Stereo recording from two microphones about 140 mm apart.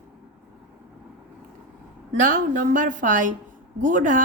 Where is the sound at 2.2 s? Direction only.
70° right (ahead or behind).